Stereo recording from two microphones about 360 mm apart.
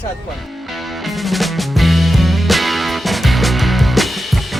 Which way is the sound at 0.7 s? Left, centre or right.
Centre.